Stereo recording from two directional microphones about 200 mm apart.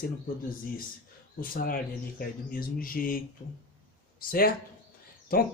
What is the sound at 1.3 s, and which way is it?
Speech, 45° left (ahead or behind).